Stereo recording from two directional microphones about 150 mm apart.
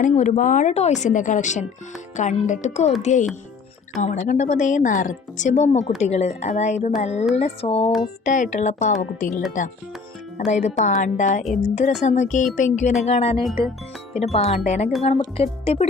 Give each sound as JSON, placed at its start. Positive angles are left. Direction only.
{"t": 0.0, "sound": "a woman's voice", "side_deg": 55}
{"t": 8.2, "sound": "speech", "side_deg": 55}
{"t": 10.5, "sound": "a woman's voice", "side_deg": 50}